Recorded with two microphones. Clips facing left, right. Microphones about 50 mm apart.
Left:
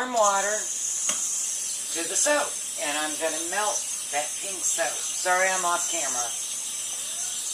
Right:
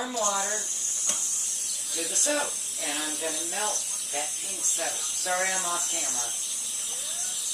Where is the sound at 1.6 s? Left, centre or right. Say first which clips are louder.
Left 2 dB; centre.